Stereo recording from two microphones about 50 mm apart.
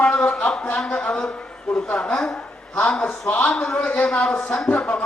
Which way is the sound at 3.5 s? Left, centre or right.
Centre.